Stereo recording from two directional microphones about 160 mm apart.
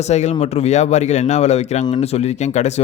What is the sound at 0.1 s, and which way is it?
Speech, 45° left (ahead or behind).